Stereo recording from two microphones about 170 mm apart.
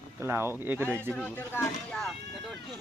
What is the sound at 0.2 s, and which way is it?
Speech, 15° right (ahead or behind).